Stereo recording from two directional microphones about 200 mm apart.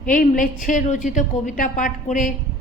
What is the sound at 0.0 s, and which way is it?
A woman's voice, 40° left (ahead or behind).